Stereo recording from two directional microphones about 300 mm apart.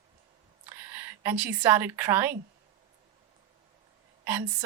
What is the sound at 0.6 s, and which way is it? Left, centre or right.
A woman's voice, centre.